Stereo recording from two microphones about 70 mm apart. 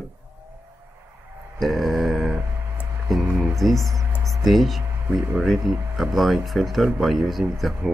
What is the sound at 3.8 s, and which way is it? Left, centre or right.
Speech, right.